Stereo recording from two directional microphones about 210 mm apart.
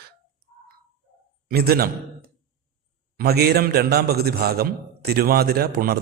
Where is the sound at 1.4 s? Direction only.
45° right (ahead or behind).